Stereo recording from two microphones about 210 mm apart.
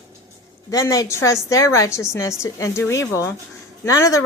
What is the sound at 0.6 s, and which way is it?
A woman's voice, 15° left (ahead or behind).